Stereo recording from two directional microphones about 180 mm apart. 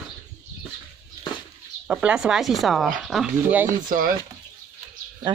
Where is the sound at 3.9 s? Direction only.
50° right (ahead or behind).